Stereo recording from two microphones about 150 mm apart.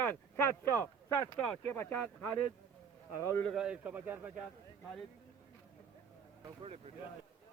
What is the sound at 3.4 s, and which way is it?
Speech, 5° right (ahead or behind).